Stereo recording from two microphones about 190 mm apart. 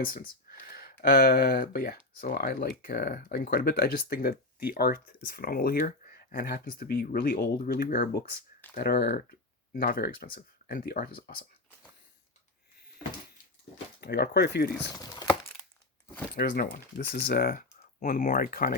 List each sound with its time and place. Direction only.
0.0 s speech: 50° left (ahead or behind)
14.0 s speech: 60° left (ahead or behind)
14.9 s a sound: 20° left (ahead or behind)
16.3 s speech: 55° left (ahead or behind)